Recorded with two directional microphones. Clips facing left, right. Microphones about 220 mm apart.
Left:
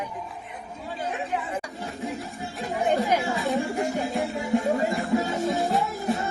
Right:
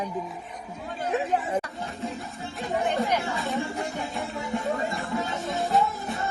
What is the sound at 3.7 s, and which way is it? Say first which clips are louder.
Music: left 5 dB; 45° left (ahead or behind).